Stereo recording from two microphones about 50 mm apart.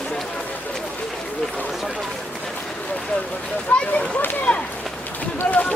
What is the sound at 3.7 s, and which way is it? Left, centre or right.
Speech, left.